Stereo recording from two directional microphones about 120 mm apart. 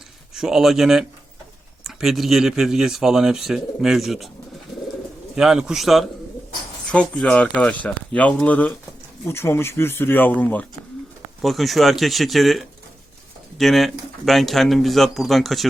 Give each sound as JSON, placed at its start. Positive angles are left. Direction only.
{"t": 0.3, "sound": "speech", "side_deg": -5}
{"t": 5.3, "sound": "speech", "side_deg": -5}
{"t": 6.9, "sound": "speech", "side_deg": 10}
{"t": 11.4, "sound": "speech", "side_deg": 0}